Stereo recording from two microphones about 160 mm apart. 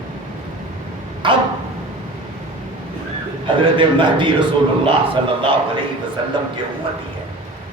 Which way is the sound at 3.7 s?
30° right (ahead or behind).